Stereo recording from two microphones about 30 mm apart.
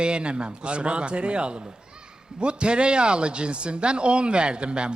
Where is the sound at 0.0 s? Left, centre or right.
Right.